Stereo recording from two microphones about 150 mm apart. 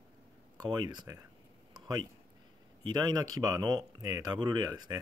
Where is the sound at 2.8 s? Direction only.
30° right (ahead or behind).